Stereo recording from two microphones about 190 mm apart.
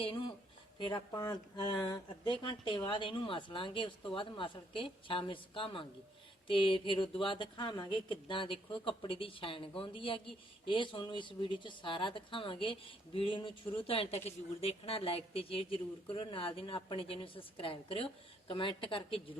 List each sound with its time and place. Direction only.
0.8 s a woman's voice: 20° left (ahead or behind)